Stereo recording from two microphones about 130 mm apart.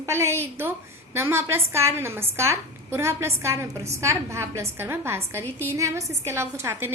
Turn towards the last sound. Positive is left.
turn(degrees=-20)  # may be behind; listen again after turning